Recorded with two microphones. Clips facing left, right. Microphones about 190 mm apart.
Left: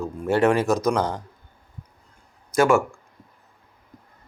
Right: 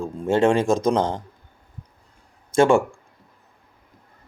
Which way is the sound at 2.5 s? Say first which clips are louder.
Right 2 dB; 30° right (ahead or behind).